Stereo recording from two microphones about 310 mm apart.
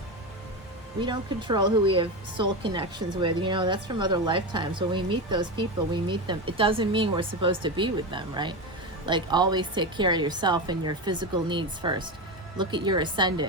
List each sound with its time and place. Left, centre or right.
1.0 s a woman's voice: centre